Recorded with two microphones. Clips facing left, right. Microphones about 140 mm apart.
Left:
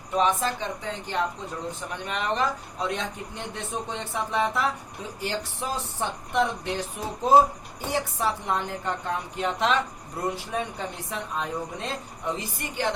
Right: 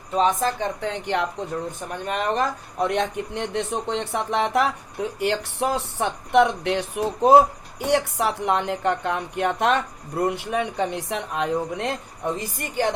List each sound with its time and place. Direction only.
0.2 s a woman's voice: 45° right (ahead or behind)
0.8 s speech: 65° right (ahead or behind)
2.0 s speech: 45° right (ahead or behind)
10.2 s speech: 70° right (ahead or behind)
12.4 s a woman's voice: 50° right (ahead or behind)